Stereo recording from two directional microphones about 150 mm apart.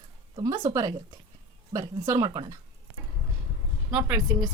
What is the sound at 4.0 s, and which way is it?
Speech, 10° right (ahead or behind).